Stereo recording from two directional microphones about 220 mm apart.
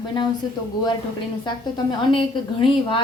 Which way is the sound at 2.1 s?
25° left (ahead or behind).